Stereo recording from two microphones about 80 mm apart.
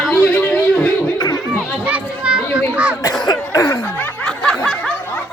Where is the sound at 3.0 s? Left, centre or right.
Left.